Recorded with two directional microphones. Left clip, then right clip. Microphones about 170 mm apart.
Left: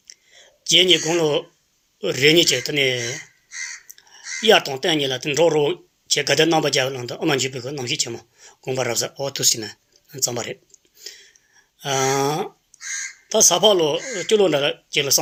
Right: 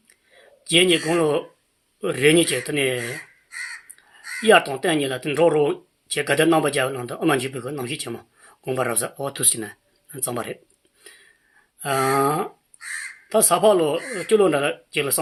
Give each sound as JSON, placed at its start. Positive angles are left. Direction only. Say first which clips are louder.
{"t": 0.3, "sound": "a sound", "louder": "left 2 dB", "side_deg": 35}
{"t": 1.1, "sound": "speech", "louder": "left 1 dB", "side_deg": 35}
{"t": 11.0, "sound": "a sound", "louder": "left 8 dB", "side_deg": 35}
{"t": 11.8, "sound": "speech", "louder": "even", "side_deg": 40}
{"t": 12.2, "sound": "speech", "louder": "right 1 dB", "side_deg": 30}
{"t": 12.8, "sound": "speech", "louder": "left 2 dB", "side_deg": 50}
{"t": 14.3, "sound": "speech", "louder": "left 1 dB", "side_deg": 35}